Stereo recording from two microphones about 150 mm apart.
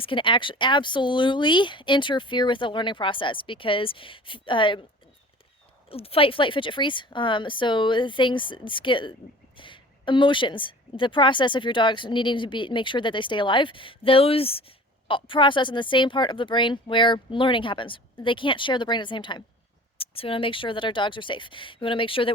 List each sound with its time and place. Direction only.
0.0 s a woman's voice: 35° left (ahead or behind)
5.9 s a woman's voice: 40° left (ahead or behind)